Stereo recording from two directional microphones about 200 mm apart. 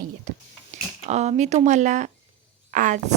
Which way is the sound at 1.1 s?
35° right (ahead or behind).